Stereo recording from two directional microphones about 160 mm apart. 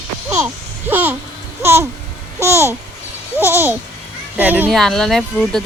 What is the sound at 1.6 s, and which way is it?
Babbling, 15° right (ahead or behind).